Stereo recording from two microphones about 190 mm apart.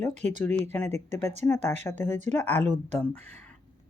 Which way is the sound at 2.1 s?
40° right (ahead or behind).